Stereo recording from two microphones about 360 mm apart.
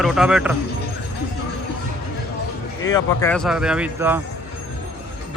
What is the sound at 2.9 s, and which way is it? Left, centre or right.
Speech, centre.